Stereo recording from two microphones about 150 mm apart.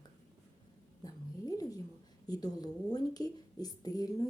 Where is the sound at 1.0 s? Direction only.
25° left (ahead or behind).